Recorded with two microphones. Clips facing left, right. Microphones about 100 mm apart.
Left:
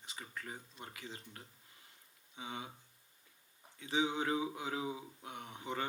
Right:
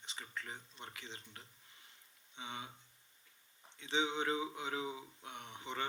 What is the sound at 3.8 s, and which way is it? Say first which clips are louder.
Speech: left 2 dB; 25° right (ahead or behind).